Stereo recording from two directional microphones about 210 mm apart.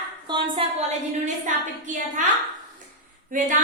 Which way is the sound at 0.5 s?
30° right (ahead or behind).